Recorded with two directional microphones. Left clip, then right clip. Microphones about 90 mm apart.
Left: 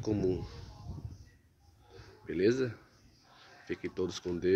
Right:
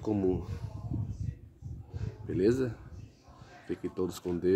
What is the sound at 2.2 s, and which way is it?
Speech, 20° right (ahead or behind).